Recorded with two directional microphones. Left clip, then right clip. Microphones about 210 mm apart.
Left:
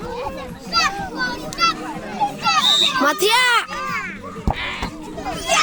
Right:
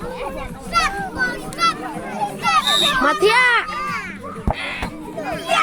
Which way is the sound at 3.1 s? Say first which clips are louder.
Right 3 dB; 60° left (ahead or behind).